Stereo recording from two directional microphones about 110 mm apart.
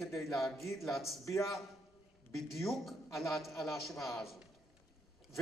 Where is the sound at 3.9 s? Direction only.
30° left (ahead or behind).